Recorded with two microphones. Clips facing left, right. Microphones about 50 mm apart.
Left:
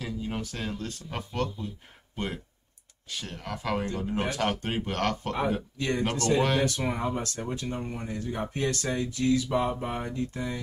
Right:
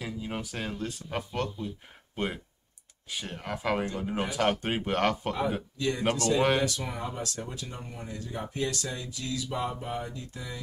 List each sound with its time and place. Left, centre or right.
0.0 s speech: centre
5.8 s speech: left